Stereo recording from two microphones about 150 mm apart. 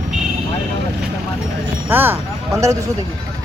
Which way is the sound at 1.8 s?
15° right (ahead or behind).